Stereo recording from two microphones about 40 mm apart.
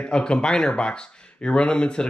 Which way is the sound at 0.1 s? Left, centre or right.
Left.